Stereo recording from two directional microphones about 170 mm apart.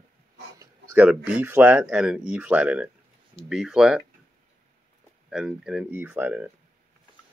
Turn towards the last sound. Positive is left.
turn(degrees=-10)  # may be behind; listen again after turning